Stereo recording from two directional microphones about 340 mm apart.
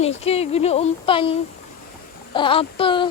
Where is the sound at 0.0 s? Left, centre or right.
Centre.